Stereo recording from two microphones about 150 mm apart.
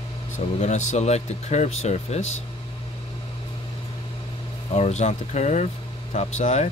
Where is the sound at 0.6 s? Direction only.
50° left (ahead or behind).